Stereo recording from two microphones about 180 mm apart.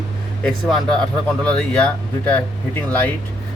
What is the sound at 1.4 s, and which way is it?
Speech, 5° left (ahead or behind).